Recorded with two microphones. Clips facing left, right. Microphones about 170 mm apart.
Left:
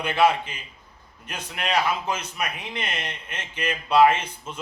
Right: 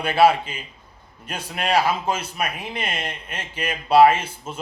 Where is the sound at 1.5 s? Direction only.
35° right (ahead or behind).